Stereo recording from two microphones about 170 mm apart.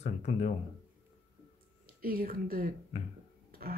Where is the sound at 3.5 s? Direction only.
65° right (ahead or behind).